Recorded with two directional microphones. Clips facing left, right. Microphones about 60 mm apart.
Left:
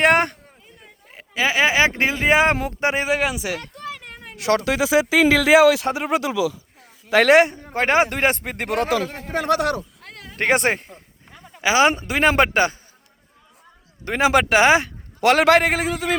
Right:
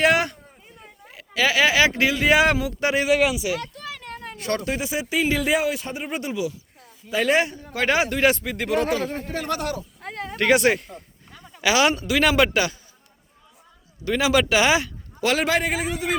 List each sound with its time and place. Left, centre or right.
0.0 s speech: left
1.1 s speech: left
4.4 s speech: left
6.8 s speech: left
7.4 s a man's voice: left
9.3 s a man's voice: left
9.6 s speech: left
10.3 s speech: left
14.0 s speech: left
15.2 s a man's voice: left